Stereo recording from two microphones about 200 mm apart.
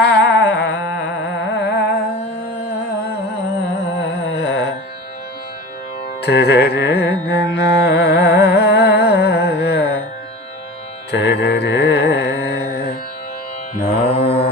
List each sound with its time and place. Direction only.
0.0 s music: 60° left (ahead or behind)
4.0 s music: 60° left (ahead or behind)
6.2 s carnatic music: 55° left (ahead or behind)
11.1 s music: 55° left (ahead or behind)
13.9 s mantra: 30° left (ahead or behind)